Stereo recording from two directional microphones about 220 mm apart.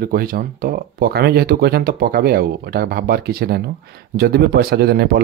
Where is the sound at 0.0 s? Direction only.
40° right (ahead or behind).